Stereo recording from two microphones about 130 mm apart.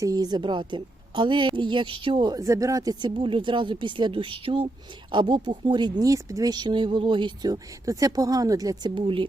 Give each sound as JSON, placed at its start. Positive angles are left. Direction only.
{"t": 0.0, "sound": "a woman's voice", "side_deg": -30}